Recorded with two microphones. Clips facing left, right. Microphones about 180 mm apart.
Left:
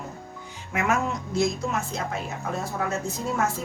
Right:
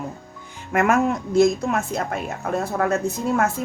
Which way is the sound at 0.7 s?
55° right (ahead or behind).